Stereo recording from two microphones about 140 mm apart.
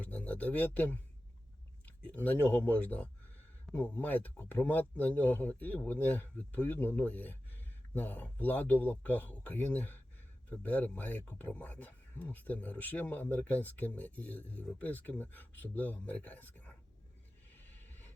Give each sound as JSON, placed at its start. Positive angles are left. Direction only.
{"t": 0.0, "sound": "speech", "side_deg": 10}
{"t": 2.0, "sound": "speech", "side_deg": 10}
{"t": 17.7, "sound": "vehicle", "side_deg": 15}